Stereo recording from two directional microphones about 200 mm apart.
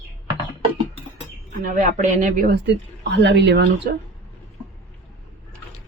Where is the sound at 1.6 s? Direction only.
45° right (ahead or behind); by 3.9 s 60° right (ahead or behind).